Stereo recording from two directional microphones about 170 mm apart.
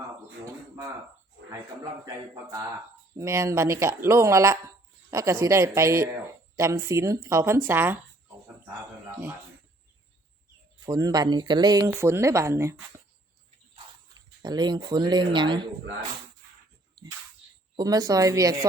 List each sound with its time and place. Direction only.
2.0 s speech: 20° right (ahead or behind)
10.8 s speech: 20° right (ahead or behind)
14.1 s speech: 25° right (ahead or behind)
16.9 s dog: 20° right (ahead or behind)
17.7 s speech: 20° right (ahead or behind)